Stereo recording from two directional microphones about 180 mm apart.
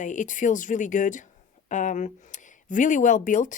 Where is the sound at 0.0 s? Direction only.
45° left (ahead or behind).